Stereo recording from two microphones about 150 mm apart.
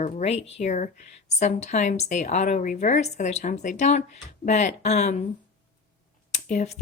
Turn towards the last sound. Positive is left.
turn(degrees=55)  # may be behind; listen again after turning